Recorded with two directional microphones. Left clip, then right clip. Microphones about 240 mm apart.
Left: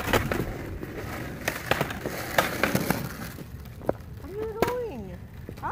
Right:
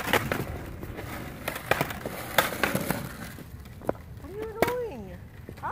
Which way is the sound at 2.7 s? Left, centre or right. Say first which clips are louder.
Left 2 dB; left.